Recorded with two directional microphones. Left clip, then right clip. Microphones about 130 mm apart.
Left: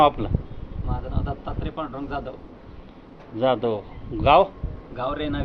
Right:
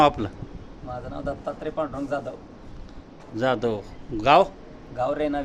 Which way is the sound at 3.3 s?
40° right (ahead or behind).